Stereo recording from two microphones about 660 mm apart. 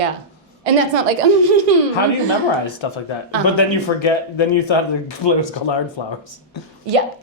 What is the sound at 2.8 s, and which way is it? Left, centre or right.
Speech, left.